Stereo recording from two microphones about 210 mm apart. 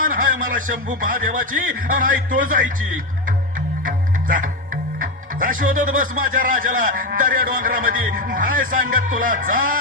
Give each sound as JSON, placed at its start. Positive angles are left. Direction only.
{"t": 0.0, "sound": "speech", "side_deg": -40}
{"t": 3.8, "sound": "speech", "side_deg": -40}